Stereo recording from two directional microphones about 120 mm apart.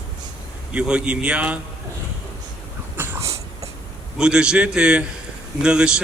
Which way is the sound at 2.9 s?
20° right (ahead or behind).